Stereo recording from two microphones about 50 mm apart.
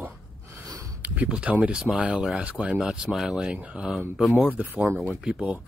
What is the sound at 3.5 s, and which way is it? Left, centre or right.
Speech, right.